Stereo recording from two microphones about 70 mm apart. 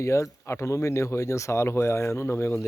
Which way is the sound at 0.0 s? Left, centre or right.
Left.